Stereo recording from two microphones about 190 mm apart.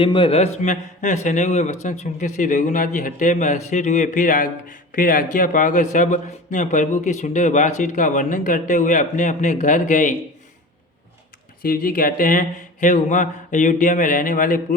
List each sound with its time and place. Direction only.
0.0 s a man's voice: 25° left (ahead or behind)
11.6 s speech: 50° left (ahead or behind)